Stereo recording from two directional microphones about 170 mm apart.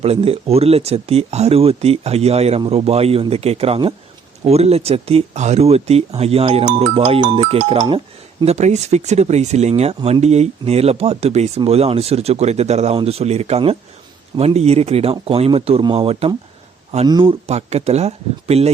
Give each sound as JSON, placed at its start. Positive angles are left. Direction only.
{"t": 0.0, "sound": "speech", "side_deg": -35}